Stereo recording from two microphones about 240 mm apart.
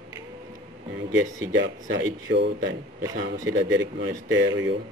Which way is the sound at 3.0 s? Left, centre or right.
Centre.